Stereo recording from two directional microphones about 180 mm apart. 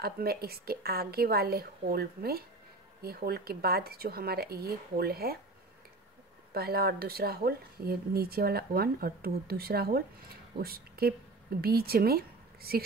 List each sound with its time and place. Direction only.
0.0 s speech: 60° right (ahead or behind)
6.5 s a woman's voice: 60° right (ahead or behind)